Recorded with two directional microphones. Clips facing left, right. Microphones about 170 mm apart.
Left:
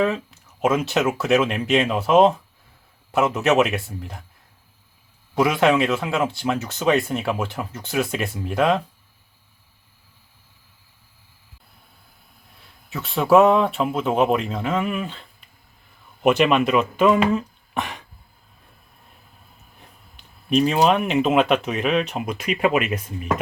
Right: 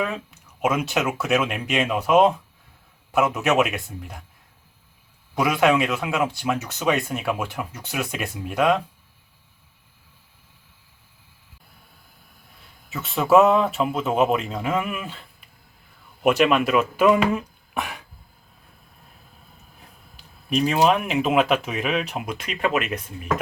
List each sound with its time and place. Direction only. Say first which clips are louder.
0.3 s speech: left 3 dB; centre (ahead or behind)
5.3 s speech: left 1 dB; centre (ahead or behind)
12.9 s speech: left 1 dB; centre (ahead or behind)
19.8 s speech: left 1 dB; centre (ahead or behind)